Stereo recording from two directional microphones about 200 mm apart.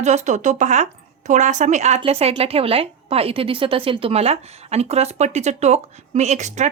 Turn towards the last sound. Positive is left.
turn(degrees=-35)  # may be behind; listen again after turning